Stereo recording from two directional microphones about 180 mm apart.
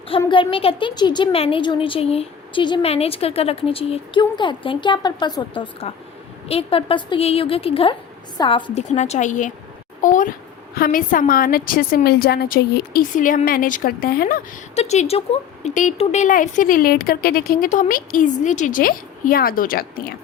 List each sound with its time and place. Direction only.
0.3 s a woman's voice: 30° left (ahead or behind)
8.9 s speech: 40° left (ahead or behind)
14.8 s speech: 35° left (ahead or behind); by 20.1 s 55° left (ahead or behind)